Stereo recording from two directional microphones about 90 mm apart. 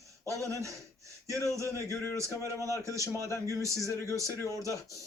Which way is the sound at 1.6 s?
30° left (ahead or behind).